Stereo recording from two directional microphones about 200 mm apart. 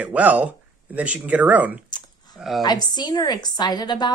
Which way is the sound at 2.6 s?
20° left (ahead or behind).